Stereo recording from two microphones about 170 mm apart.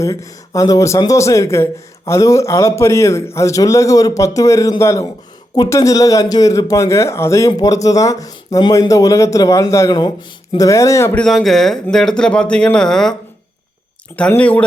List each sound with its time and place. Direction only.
0.0 s a man's voice: 20° left (ahead or behind); by 13.1 s 5° left (ahead or behind)
14.2 s speech: 10° left (ahead or behind)